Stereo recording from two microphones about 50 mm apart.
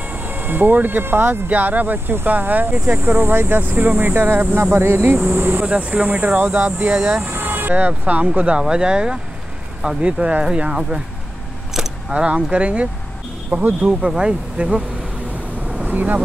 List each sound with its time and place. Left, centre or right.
0.1 s speech: right
1.5 s speech: right
5.6 s speech: right
6.5 s speech: right
7.2 s speech: right
8.5 s speech: centre
12.1 s speech: right
15.9 s speech: right